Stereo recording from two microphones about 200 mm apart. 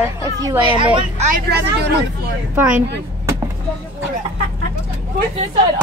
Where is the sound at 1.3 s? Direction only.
55° right (ahead or behind).